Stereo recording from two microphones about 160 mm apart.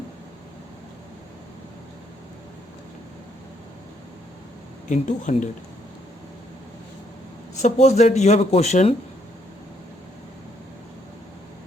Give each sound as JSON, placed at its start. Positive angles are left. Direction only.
{"t": 4.9, "sound": "speech", "side_deg": 50}
{"t": 7.6, "sound": "speech", "side_deg": 45}